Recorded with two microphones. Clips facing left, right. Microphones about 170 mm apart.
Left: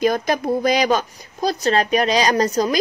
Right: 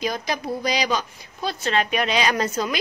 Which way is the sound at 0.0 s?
50° left (ahead or behind).